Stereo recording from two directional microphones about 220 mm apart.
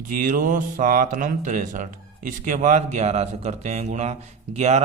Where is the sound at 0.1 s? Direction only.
40° right (ahead or behind).